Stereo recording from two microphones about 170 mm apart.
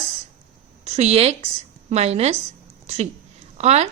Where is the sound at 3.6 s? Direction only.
40° right (ahead or behind).